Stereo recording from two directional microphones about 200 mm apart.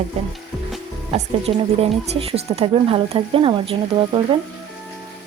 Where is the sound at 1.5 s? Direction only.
25° right (ahead or behind).